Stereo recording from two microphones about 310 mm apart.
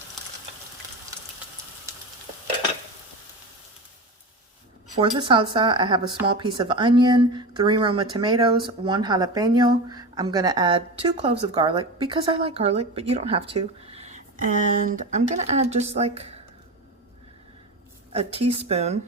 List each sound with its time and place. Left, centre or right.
4.9 s speech: centre
18.1 s speech: centre